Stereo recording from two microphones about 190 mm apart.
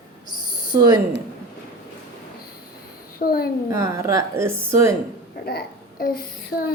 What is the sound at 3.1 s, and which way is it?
Child singing, 50° left (ahead or behind).